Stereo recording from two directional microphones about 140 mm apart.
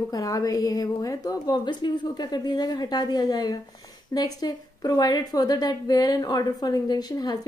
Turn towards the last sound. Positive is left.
turn(degrees=30)  # may be behind; listen again after turning